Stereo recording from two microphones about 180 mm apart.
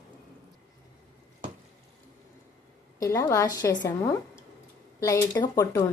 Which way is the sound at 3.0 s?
15° left (ahead or behind).